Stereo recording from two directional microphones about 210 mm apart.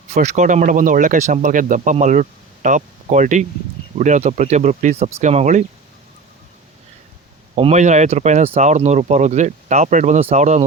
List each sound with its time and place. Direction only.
0.1 s speech: 35° right (ahead or behind)
7.5 s speech: 30° right (ahead or behind)